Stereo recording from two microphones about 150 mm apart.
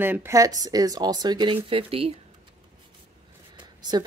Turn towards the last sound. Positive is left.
turn(degrees=-30)  # may be behind; listen again after turning